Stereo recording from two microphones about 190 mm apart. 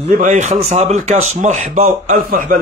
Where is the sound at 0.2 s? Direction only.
40° right (ahead or behind).